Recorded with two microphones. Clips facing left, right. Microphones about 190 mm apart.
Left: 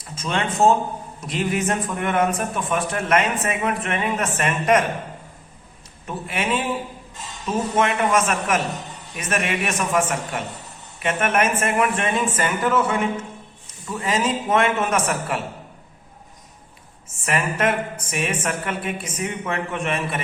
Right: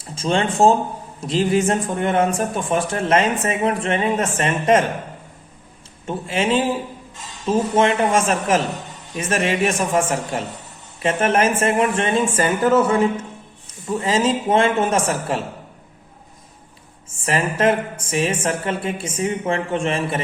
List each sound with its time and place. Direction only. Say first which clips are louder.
0.0 s a man's voice: right 5 dB; 30° right (ahead or behind)
6.1 s a woman's voice: right 4 dB; 30° right (ahead or behind)
17.2 s a woman's voice: right 4 dB; 30° right (ahead or behind)